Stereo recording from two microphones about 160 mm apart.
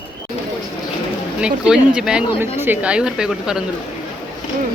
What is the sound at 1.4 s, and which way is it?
Speech, 5° right (ahead or behind).